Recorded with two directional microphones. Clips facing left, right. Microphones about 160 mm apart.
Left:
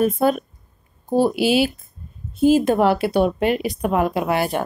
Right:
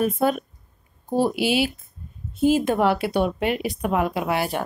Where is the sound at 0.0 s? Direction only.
40° left (ahead or behind).